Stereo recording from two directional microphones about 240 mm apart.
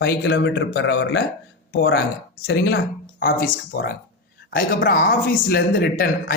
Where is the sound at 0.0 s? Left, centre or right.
Left.